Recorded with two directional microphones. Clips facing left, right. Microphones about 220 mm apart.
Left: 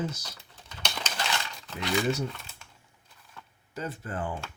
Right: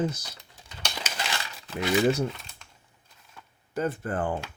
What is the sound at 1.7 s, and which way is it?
Speech, 55° right (ahead or behind).